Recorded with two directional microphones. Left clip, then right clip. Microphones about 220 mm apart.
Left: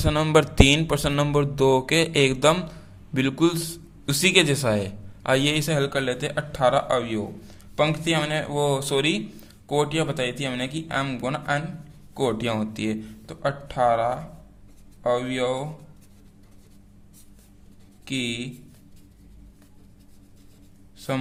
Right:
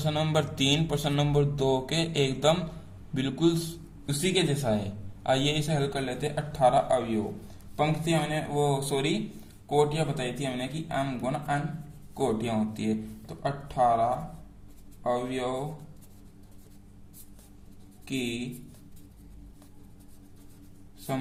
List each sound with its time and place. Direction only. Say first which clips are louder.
0.0 s speech: left 8 dB; 25° left (ahead or behind)
4.0 s a man's voice: left 8 dB; 45° left (ahead or behind)
5.2 s a man's voice: left 5 dB; 35° left (ahead or behind); by 15.4 s 50° left (ahead or behind)
18.0 s a man's voice: left 5 dB; 50° left (ahead or behind)